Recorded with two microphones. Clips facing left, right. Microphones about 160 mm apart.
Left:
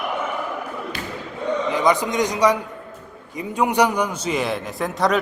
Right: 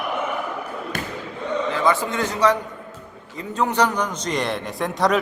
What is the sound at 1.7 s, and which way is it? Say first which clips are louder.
A man's voice: left 2 dB; 15° left (ahead or behind).